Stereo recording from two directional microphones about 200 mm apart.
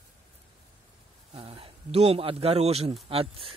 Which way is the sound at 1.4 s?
30° right (ahead or behind).